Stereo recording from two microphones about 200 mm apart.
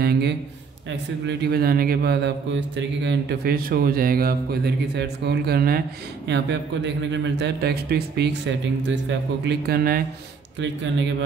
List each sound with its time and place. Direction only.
0.0 s a sound: 50° right (ahead or behind)
1.2 s a man's voice: 55° right (ahead or behind)
10.6 s a man's voice: 65° right (ahead or behind)